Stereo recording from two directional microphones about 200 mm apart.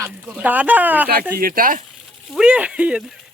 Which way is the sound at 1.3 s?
45° right (ahead or behind).